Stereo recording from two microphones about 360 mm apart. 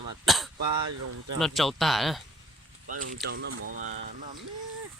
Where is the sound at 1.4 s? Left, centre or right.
Centre.